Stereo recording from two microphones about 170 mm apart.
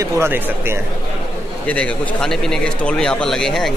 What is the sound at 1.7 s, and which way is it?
Speech, 5° left (ahead or behind).